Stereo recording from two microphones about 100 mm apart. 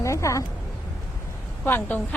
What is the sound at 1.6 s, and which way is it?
Speech, 20° left (ahead or behind).